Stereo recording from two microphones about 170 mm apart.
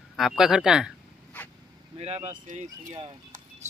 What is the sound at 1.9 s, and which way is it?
Speech, 40° right (ahead or behind).